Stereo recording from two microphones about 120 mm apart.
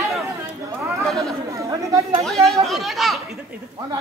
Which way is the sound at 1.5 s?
25° right (ahead or behind).